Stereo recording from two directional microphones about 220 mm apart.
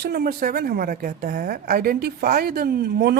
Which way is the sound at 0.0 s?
45° right (ahead or behind).